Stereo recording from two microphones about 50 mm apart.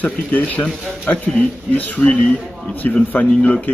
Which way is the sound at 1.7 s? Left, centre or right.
Left.